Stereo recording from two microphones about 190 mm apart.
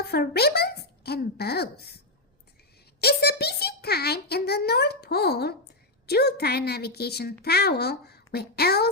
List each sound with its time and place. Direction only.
0.0 s a child's voice: 55° left (ahead or behind)
3.0 s a child's voice: 55° left (ahead or behind)